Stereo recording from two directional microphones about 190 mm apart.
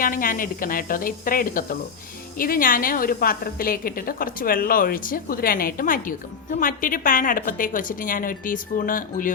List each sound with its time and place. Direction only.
0.0 s a woman's voice: 45° left (ahead or behind)